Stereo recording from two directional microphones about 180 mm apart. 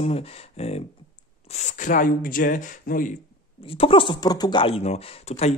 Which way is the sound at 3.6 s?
30° left (ahead or behind).